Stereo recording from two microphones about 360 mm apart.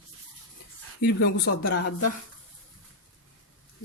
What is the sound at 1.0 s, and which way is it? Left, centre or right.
Speech, left.